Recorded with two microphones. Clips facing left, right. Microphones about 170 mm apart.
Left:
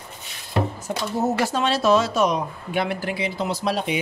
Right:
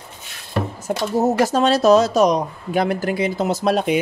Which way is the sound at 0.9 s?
45° right (ahead or behind).